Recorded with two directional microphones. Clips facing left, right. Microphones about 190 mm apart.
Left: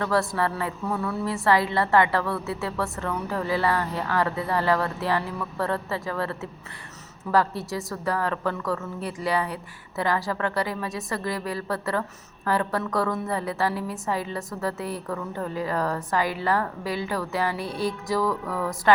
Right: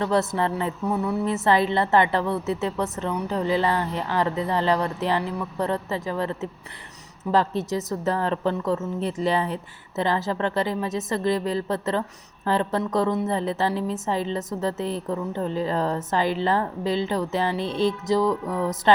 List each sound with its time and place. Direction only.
0.0 s a woman's voice: 20° right (ahead or behind)